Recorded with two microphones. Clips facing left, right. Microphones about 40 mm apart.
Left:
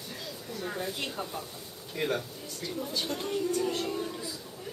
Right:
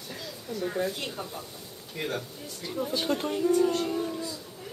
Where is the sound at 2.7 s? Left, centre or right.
Centre.